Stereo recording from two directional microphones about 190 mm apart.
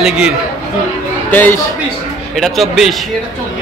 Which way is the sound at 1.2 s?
10° left (ahead or behind).